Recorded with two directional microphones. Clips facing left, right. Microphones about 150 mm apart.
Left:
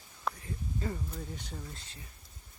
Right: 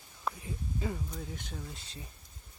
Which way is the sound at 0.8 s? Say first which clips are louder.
Even; 5° right (ahead or behind).